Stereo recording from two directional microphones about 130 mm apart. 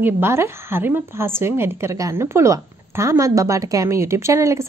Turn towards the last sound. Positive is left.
turn(degrees=-25)  # may be behind; listen again after turning